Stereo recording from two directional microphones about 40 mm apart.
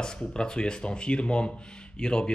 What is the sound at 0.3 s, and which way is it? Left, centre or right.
Speech, left.